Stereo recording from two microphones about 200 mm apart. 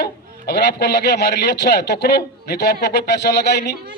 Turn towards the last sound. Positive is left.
turn(degrees=55)  # may be behind; listen again after turning